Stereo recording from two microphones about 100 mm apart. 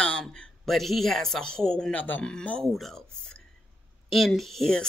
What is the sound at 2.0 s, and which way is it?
Speech, 15° left (ahead or behind).